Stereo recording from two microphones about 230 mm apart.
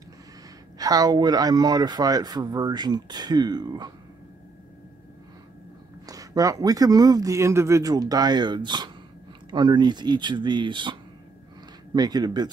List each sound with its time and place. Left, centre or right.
0.7 s speech: centre
6.0 s speech: centre